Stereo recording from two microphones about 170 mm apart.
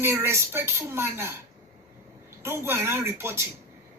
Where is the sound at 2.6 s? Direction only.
15° right (ahead or behind).